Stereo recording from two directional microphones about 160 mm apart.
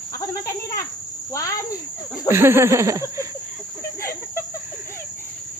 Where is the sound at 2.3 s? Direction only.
15° right (ahead or behind).